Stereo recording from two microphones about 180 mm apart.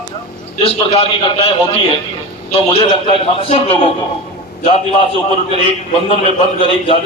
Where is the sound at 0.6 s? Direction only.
30° left (ahead or behind).